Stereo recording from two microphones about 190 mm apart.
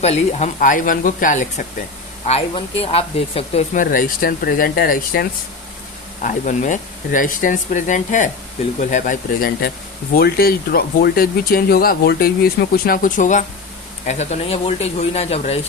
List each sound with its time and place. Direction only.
0.0 s speech: 35° left (ahead or behind)
3.8 s speech: 45° left (ahead or behind)